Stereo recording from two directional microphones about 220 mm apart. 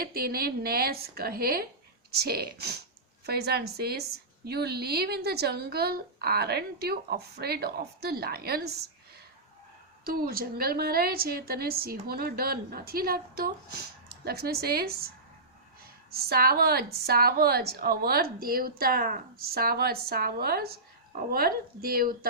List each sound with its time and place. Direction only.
0.0 s a woman's voice: 45° right (ahead or behind)
10.0 s a woman's voice: 45° right (ahead or behind)